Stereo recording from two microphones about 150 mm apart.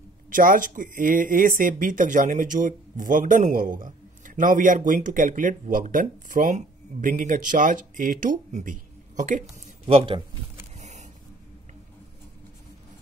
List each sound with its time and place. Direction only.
0.3 s speech: 65° right (ahead or behind)
9.8 s speech: 40° right (ahead or behind)
10.8 s a sound: 50° right (ahead or behind)